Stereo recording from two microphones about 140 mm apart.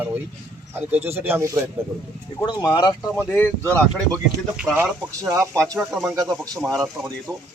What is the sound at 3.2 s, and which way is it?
Speech, 10° left (ahead or behind).